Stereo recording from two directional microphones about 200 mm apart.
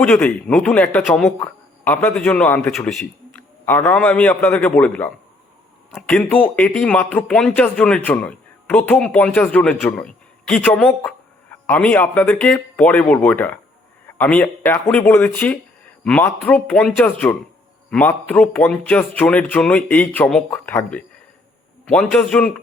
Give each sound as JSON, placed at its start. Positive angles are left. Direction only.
{"t": 0.0, "sound": "speech", "side_deg": 5}